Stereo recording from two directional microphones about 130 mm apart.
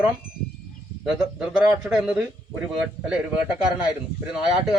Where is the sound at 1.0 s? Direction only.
5° right (ahead or behind).